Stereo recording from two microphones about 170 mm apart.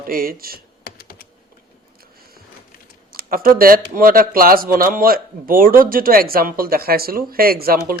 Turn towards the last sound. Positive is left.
turn(degrees=-60)  # may be behind; listen again after turning